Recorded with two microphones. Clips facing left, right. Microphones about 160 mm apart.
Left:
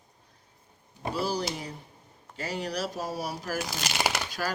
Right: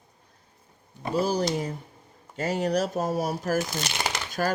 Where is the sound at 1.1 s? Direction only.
45° right (ahead or behind).